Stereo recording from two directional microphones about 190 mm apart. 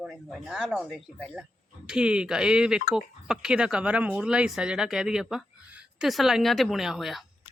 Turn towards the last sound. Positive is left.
turn(degrees=0)  # may be behind; listen again after turning